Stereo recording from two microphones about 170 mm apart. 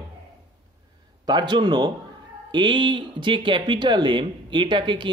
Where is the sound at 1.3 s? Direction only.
25° right (ahead or behind).